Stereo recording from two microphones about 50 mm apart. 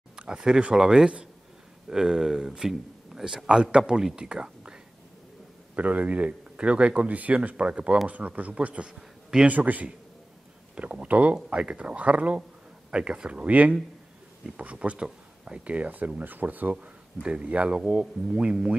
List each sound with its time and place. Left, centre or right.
0.3 s speech: centre
3.4 s speech: centre
5.8 s speech: right
16.8 s speech: right